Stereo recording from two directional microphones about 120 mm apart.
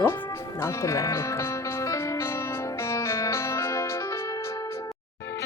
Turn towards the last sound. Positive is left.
turn(degrees=25)  # may be behind; listen again after turning